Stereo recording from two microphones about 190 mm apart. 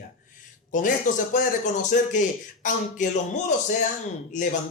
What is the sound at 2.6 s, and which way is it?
A man's voice, 45° left (ahead or behind).